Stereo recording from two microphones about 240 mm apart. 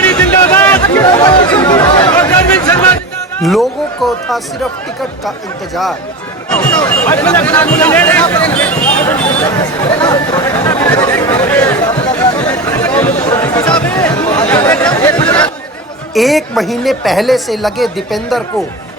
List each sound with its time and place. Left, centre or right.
0.0 s a sound: centre
1.0 s chatter: centre
2.1 s a sound: centre
3.3 s speech: centre
6.5 s speech: centre
9.2 s speech: left; by 13.1 s centre
13.2 s chatter: centre
13.7 s a sound: centre
14.4 s chatter: centre
16.1 s a woman's voice: centre